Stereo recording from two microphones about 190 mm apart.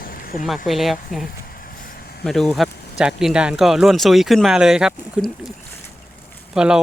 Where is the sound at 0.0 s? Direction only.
50° left (ahead or behind).